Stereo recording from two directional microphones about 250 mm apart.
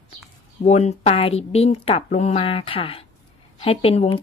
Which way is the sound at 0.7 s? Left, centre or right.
Left.